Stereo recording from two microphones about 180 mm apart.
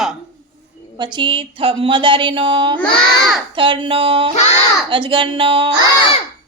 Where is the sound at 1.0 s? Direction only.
25° right (ahead or behind).